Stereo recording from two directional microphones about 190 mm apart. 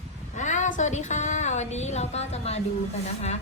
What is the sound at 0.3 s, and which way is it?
A woman's voice, 40° left (ahead or behind).